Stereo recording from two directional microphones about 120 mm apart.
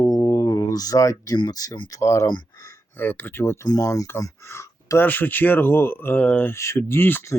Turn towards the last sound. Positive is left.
turn(degrees=20)  # may be behind; listen again after turning